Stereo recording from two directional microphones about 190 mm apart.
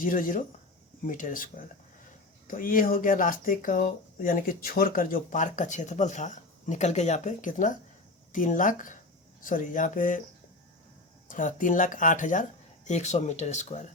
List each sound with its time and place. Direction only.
0.0 s speech: 45° left (ahead or behind)
11.3 s speech: 45° left (ahead or behind)